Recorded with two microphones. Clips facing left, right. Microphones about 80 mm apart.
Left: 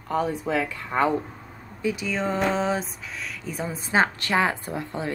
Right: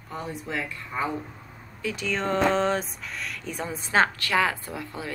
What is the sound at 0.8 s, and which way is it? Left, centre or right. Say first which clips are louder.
Speech: left 8 dB; left.